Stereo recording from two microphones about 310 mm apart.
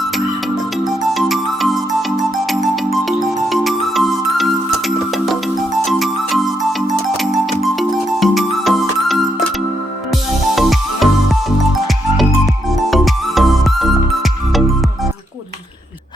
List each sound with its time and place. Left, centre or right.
1.1 s music: centre
12.7 s music: centre